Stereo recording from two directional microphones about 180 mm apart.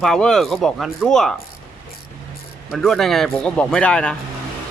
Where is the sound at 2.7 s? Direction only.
Centre (ahead or behind).